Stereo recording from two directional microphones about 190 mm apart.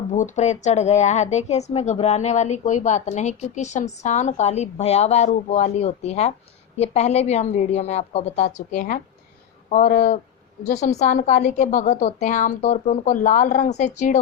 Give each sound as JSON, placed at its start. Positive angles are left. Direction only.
{"t": 0.1, "sound": "a woman's voice", "side_deg": 40}